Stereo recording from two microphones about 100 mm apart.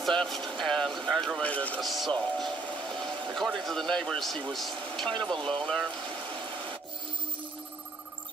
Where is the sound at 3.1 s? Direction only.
50° right (ahead or behind).